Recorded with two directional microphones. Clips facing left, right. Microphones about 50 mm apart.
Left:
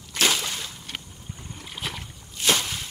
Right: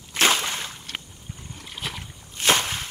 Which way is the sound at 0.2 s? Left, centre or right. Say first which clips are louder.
Right 3 dB; right.